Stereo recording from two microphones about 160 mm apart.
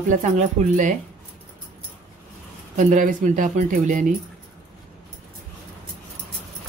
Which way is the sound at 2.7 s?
55° right (ahead or behind).